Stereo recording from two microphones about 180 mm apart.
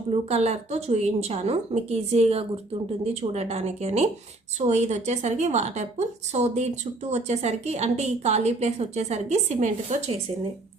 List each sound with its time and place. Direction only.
0.1 s a woman's voice: 35° right (ahead or behind)